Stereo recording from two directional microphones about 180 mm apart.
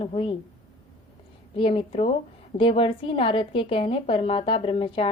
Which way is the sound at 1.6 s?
30° left (ahead or behind).